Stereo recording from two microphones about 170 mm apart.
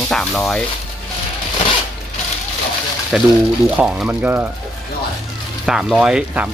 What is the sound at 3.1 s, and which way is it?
Speech, 5° right (ahead or behind).